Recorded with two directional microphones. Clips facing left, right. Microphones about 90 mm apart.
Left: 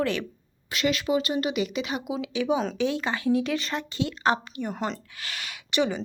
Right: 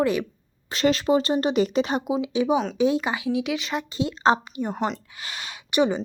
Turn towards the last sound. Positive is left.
turn(degrees=-25)  # may be behind; listen again after turning